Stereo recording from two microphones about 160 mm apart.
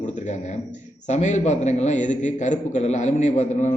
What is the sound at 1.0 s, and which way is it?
A man's voice, 45° left (ahead or behind).